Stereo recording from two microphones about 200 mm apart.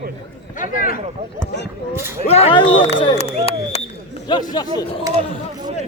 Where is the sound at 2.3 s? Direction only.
30° left (ahead or behind).